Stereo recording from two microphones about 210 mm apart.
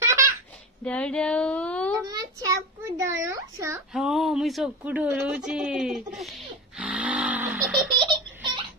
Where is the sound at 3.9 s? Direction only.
Centre (ahead or behind).